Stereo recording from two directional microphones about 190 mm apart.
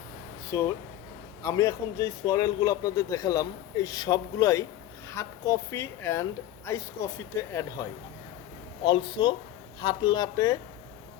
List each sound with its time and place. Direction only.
0.5 s speech: 15° left (ahead or behind)